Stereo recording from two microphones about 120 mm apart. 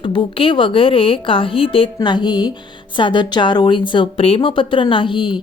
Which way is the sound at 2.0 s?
40° left (ahead or behind).